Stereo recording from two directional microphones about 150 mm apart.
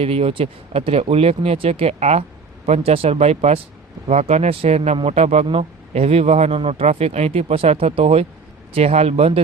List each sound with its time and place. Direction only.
0.0 s a man's voice: 40° right (ahead or behind)